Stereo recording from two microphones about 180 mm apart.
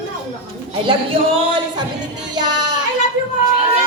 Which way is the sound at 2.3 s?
25° right (ahead or behind).